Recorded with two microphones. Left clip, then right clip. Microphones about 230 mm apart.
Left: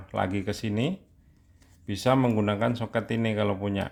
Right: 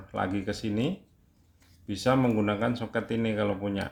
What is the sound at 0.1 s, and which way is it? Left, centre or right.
Speech, left.